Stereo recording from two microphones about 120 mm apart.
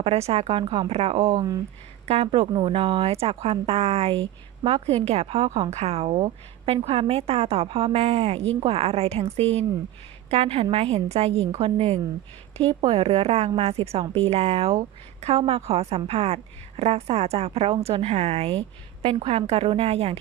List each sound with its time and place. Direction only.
0.0 s speech: 60° right (ahead or behind)
1.4 s speech: 30° right (ahead or behind)
2.0 s a woman's voice: 55° right (ahead or behind)